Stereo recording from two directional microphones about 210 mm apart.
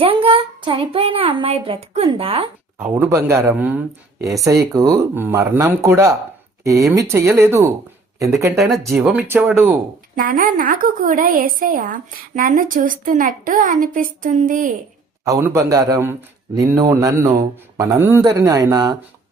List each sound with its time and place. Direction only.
0.0 s a child's voice: 25° right (ahead or behind)
2.7 s speech: 10° right (ahead or behind)
8.5 s speech: centre (ahead or behind)
10.2 s a woman's voice: 40° right (ahead or behind)
15.2 s speech: 15° right (ahead or behind)